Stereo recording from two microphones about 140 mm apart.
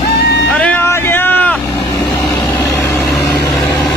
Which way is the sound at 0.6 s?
10° left (ahead or behind).